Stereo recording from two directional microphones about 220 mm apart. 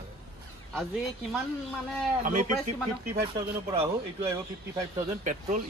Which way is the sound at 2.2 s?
35° right (ahead or behind).